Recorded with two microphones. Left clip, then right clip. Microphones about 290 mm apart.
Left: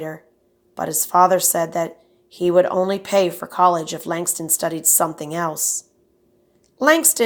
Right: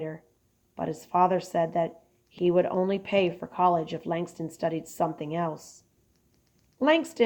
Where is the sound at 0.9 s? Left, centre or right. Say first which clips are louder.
Left 9 dB; left.